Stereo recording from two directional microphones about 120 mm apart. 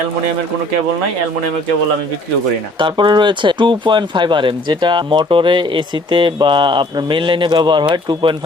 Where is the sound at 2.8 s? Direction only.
40° right (ahead or behind).